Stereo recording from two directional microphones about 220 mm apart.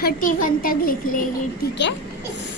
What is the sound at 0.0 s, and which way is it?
A child's voice, 40° left (ahead or behind).